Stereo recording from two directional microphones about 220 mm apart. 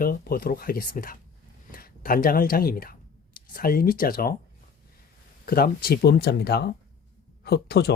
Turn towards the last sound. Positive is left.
turn(degrees=45)  # may be behind; listen again after turning